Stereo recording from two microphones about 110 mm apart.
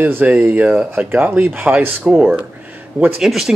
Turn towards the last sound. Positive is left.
turn(degrees=0)  # may be behind; listen again after turning